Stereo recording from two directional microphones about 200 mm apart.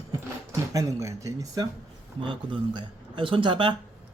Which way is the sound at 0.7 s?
15° right (ahead or behind).